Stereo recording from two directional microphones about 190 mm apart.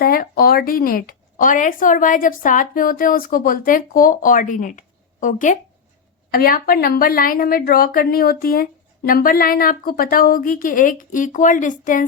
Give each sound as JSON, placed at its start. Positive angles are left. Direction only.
{"t": 0.0, "sound": "speech", "side_deg": 50}